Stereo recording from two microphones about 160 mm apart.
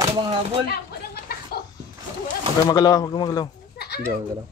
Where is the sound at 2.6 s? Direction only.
25° left (ahead or behind).